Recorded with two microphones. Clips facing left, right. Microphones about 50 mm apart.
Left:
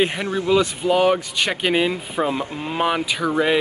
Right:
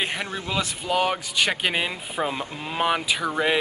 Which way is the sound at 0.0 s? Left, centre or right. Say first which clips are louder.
Left 7 dB; centre.